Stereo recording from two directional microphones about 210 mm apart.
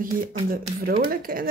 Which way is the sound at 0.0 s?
40° right (ahead or behind).